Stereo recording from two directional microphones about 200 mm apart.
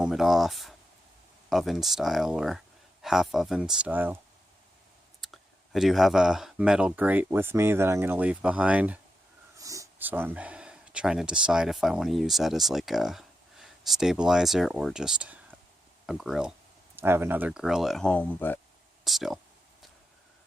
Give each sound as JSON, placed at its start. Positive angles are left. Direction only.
{"t": 0.0, "sound": "speech", "side_deg": 0}
{"t": 5.2, "sound": "speech", "side_deg": 0}